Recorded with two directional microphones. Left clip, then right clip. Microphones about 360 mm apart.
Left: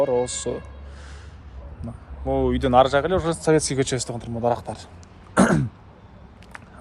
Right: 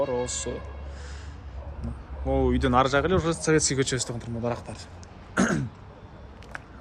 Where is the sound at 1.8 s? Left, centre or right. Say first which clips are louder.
Left 3 dB; centre.